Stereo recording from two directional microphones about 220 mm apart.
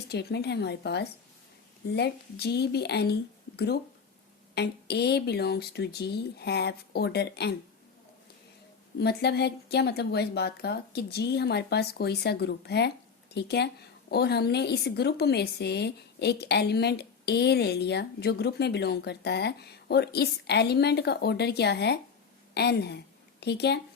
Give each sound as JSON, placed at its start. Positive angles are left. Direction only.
{"t": 0.1, "sound": "a woman's voice", "side_deg": 50}
{"t": 4.5, "sound": "a woman's voice", "side_deg": 50}
{"t": 9.0, "sound": "a woman's voice", "side_deg": 50}